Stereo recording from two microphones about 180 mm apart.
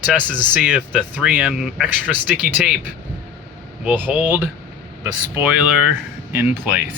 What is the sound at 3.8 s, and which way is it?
Speech, 10° right (ahead or behind).